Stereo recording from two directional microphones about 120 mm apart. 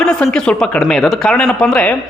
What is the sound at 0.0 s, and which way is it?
Speech, 5° left (ahead or behind).